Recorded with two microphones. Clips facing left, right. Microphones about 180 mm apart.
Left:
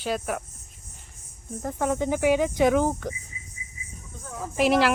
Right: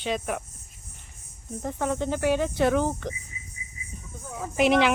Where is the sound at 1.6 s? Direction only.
5° left (ahead or behind).